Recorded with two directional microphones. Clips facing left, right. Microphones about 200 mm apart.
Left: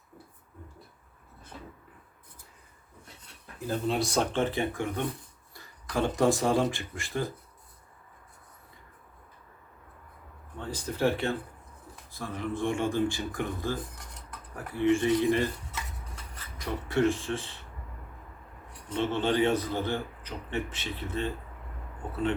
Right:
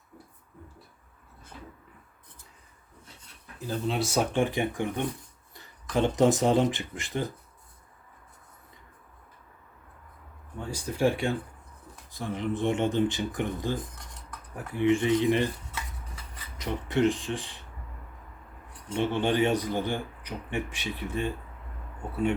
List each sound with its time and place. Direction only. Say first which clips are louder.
3.7 s a man's voice: even; centre (ahead or behind); by 7.3 s 20° right (ahead or behind)
10.6 s a man's voice: right 2 dB; 10° right (ahead or behind)
16.6 s a man's voice: right 1 dB; 20° right (ahead or behind)
18.9 s a man's voice: right 1 dB; 15° right (ahead or behind)